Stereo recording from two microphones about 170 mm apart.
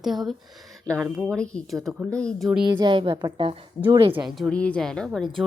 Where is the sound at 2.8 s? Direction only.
30° right (ahead or behind).